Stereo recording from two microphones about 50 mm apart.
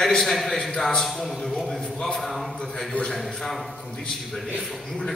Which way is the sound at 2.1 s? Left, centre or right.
Centre.